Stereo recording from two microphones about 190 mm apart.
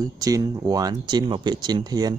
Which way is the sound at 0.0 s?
20° right (ahead or behind).